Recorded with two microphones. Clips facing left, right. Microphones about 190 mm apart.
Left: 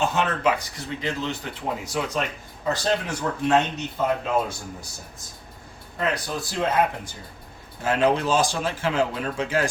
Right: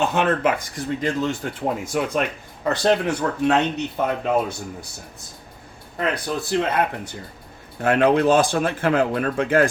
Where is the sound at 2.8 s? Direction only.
60° right (ahead or behind).